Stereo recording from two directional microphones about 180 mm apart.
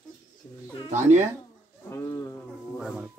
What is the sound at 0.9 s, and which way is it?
Speech, 40° right (ahead or behind).